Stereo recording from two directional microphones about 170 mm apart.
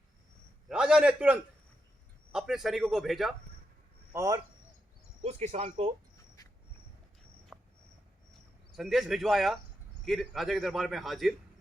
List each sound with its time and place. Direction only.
0.7 s a man's voice: 5° right (ahead or behind)
4.1 s speech: 15° right (ahead or behind)
5.2 s speech: 40° right (ahead or behind)
7.5 s cricket: 5° right (ahead or behind)
8.7 s a man's voice: centre (ahead or behind)